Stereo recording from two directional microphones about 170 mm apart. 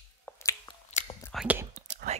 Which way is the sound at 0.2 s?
15° left (ahead or behind).